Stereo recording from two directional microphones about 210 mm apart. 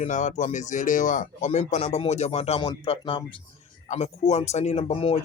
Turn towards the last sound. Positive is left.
turn(degrees=25)  # may be behind; listen again after turning